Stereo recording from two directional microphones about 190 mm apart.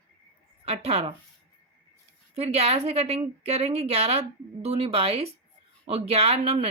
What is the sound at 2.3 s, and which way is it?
Speech, 35° right (ahead or behind).